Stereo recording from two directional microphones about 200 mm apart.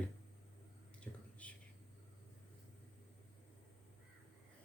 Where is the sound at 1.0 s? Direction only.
5° left (ahead or behind).